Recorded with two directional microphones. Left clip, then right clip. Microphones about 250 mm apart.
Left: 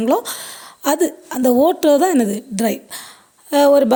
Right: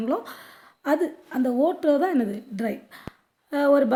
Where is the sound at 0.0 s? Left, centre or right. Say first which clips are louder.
Left 10 dB; left.